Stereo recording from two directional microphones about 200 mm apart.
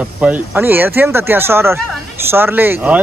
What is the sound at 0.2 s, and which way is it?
Speech, 10° right (ahead or behind).